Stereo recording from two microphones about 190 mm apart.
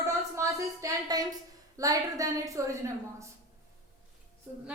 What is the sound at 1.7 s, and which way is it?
A woman's voice, 15° right (ahead or behind).